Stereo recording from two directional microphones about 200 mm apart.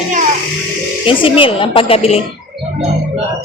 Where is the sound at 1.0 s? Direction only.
25° left (ahead or behind).